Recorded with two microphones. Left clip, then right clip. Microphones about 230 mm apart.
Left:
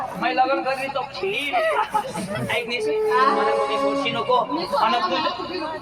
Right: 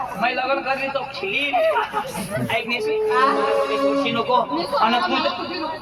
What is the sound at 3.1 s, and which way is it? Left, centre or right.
Speech, right.